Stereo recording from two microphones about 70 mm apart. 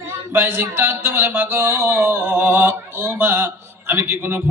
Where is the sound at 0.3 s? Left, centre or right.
Right.